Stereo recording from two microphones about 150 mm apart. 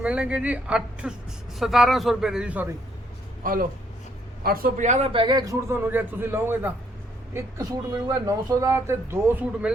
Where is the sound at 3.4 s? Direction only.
70° right (ahead or behind); by 5.1 s 50° right (ahead or behind).